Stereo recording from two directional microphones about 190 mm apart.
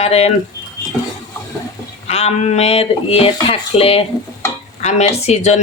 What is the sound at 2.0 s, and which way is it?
Speech, 35° left (ahead or behind).